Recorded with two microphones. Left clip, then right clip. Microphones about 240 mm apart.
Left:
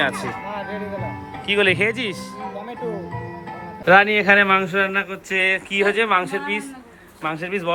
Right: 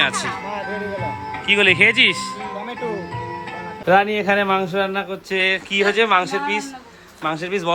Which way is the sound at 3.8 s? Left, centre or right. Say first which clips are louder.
Left 3 dB; centre.